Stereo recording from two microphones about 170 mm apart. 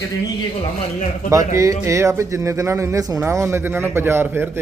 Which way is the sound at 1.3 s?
20° right (ahead or behind).